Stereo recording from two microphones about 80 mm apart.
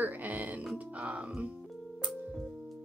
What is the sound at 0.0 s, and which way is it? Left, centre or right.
Music, right.